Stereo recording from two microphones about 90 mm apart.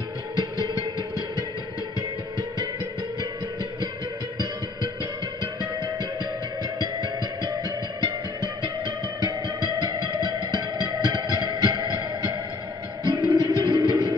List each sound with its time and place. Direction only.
0.4 s music: 50° right (ahead or behind)
5.4 s music: 50° right (ahead or behind)
13.0 s music: 45° right (ahead or behind)